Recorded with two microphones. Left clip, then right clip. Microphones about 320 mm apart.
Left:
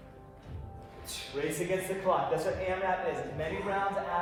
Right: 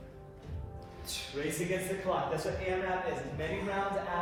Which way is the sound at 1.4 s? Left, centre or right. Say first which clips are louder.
Left 3 dB; centre.